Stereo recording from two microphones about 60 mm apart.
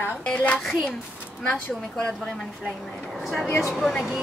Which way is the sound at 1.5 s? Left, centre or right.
Centre.